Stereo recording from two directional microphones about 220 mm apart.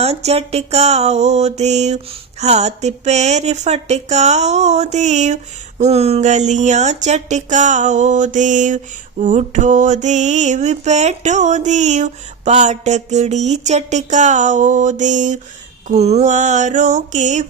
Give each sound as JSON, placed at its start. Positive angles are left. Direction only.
{"t": 0.0, "sound": "music", "side_deg": -30}
{"t": 2.4, "sound": "mantra", "side_deg": -30}